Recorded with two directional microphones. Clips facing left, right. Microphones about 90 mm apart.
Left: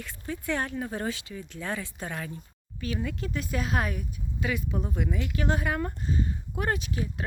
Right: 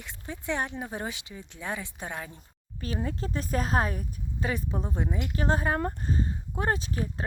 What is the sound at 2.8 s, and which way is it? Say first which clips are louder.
A woman's voice: even; 35° right (ahead or behind).